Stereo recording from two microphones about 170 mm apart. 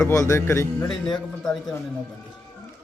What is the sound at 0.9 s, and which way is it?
Speech, 5° left (ahead or behind).